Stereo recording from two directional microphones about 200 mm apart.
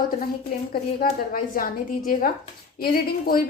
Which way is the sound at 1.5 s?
45° left (ahead or behind).